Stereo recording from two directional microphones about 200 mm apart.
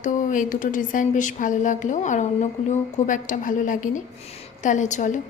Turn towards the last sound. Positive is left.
turn(degrees=40)  # may be behind; listen again after turning